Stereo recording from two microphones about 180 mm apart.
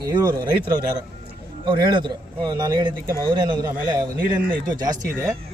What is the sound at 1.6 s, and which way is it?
A man's voice, 25° right (ahead or behind).